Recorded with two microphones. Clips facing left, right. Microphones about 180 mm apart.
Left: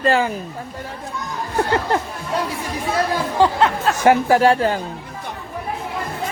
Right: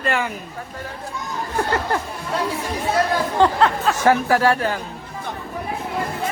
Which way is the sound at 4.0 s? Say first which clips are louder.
Left 3 dB; 20° left (ahead or behind).